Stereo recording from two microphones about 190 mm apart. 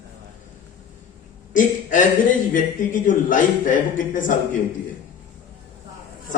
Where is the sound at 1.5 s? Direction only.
45° left (ahead or behind).